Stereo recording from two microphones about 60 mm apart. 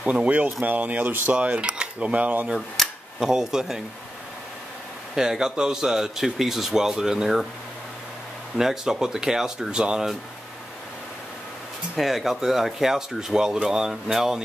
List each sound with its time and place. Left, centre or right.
0.0 s cutlery: right
3.2 s speech: centre
5.1 s speech: centre
8.5 s speech: centre
12.0 s speech: centre